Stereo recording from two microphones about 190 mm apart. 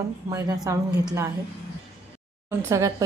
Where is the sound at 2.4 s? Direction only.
15° right (ahead or behind).